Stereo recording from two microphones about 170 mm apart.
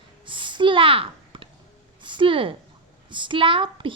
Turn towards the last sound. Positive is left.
turn(degrees=-30)  # may be behind; listen again after turning